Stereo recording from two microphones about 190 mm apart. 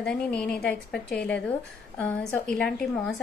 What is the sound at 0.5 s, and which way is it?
Speech, 55° left (ahead or behind).